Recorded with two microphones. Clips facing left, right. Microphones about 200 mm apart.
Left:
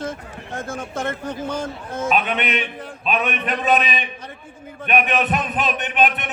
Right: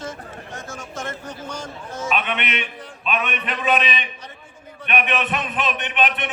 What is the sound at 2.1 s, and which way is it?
A man's voice, 40° left (ahead or behind).